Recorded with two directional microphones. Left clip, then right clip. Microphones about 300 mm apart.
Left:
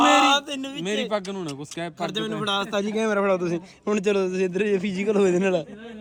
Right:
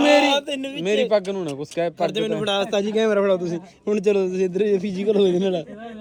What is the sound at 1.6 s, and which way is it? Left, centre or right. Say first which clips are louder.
Speech: right 9 dB; left.